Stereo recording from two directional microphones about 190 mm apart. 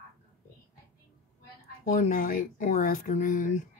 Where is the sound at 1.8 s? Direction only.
40° left (ahead or behind).